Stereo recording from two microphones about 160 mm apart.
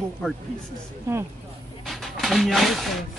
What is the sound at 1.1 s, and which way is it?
Speech, 20° right (ahead or behind).